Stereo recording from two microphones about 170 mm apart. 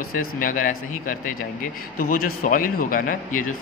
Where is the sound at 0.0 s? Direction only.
55° left (ahead or behind).